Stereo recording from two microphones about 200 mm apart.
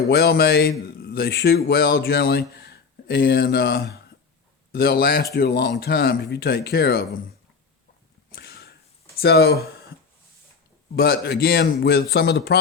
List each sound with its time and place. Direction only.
0.1 s a man's voice: 50° left (ahead or behind)
8.3 s whip: 50° left (ahead or behind)
9.2 s a man's voice: 55° left (ahead or behind)
10.9 s a man's voice: 50° left (ahead or behind)